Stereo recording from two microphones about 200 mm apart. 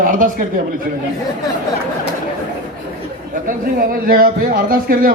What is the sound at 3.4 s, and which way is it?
A man's voice, 45° right (ahead or behind).